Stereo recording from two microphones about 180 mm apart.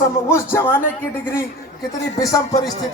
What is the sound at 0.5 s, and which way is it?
Speech, 10° left (ahead or behind).